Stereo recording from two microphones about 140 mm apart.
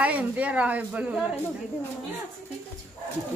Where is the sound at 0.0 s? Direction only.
10° right (ahead or behind).